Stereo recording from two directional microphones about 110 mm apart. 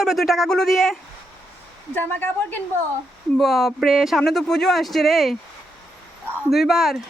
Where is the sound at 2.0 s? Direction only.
20° left (ahead or behind).